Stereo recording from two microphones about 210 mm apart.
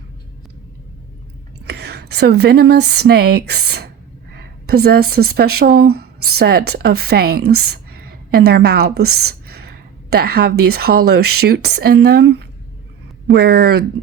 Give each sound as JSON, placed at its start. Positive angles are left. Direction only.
{"t": 1.6, "sound": "speech", "side_deg": -50}